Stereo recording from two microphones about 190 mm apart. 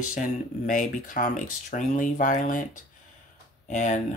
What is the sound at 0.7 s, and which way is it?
Speech, 45° left (ahead or behind).